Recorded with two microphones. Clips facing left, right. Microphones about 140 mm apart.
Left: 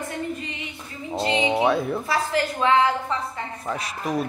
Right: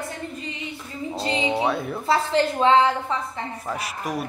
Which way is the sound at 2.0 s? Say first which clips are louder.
Right 3 dB; 25° right (ahead or behind).